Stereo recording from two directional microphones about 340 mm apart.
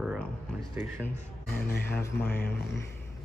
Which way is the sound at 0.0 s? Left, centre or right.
Centre.